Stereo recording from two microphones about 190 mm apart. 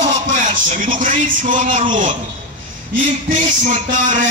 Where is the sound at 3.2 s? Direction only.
40° right (ahead or behind).